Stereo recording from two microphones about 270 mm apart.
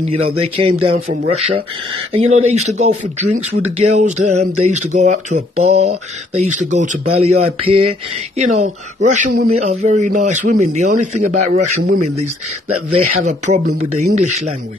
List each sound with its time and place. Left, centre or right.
0.0 s a man's voice: right